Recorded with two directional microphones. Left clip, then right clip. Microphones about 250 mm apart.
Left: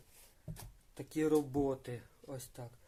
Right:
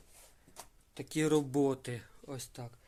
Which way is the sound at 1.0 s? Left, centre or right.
Right.